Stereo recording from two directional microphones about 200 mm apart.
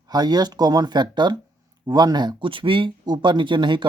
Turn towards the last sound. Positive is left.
turn(degrees=-25)  # may be behind; listen again after turning